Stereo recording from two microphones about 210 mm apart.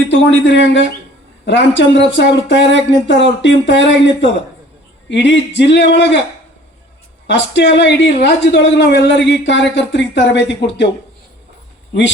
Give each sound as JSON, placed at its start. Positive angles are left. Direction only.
{"t": 0.1, "sound": "speech", "side_deg": 60}
{"t": 7.3, "sound": "speech", "side_deg": 55}